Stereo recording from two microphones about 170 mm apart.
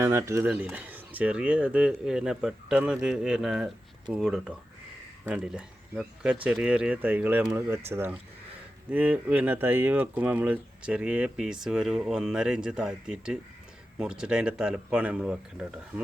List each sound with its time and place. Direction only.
0.0 s speech: 15° right (ahead or behind)